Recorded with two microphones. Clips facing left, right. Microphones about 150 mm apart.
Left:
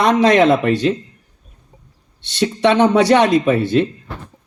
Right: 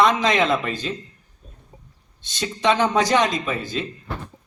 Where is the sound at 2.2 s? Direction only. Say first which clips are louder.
Left 6 dB; 65° left (ahead or behind).